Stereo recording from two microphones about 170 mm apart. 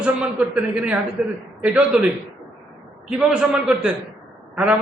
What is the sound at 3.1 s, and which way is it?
A man's voice, 5° right (ahead or behind).